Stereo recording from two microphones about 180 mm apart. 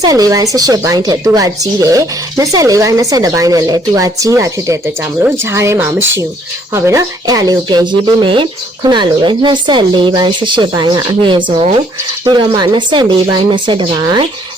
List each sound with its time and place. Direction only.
0.0 s speech: 20° right (ahead or behind)